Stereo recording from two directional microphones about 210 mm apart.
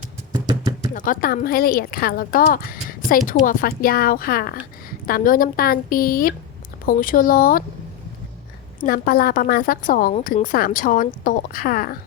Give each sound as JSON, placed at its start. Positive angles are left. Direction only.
{"t": 0.9, "sound": "speech", "side_deg": 40}
{"t": 8.8, "sound": "speech", "side_deg": 45}